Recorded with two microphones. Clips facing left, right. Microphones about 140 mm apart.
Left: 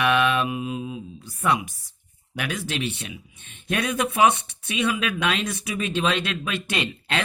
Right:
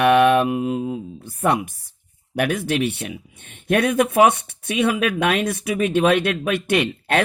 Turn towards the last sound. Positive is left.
turn(degrees=-55)  # may be behind; listen again after turning